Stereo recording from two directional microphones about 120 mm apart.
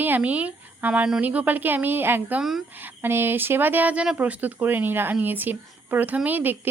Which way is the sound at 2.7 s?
15° right (ahead or behind).